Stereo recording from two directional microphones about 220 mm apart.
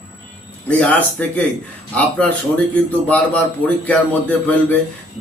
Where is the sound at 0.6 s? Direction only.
5° left (ahead or behind).